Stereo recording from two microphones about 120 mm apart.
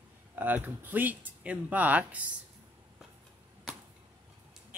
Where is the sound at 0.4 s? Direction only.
15° right (ahead or behind).